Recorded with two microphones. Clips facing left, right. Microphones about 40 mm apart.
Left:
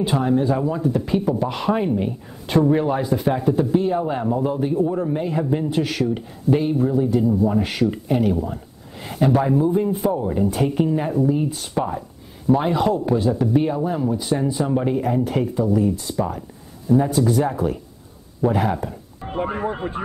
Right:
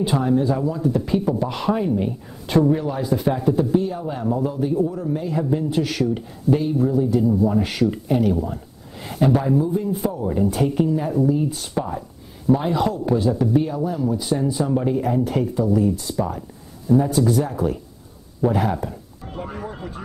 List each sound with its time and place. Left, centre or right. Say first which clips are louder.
0.0 s speech: even; left